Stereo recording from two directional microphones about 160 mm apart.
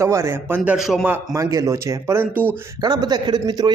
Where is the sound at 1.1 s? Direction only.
20° right (ahead or behind).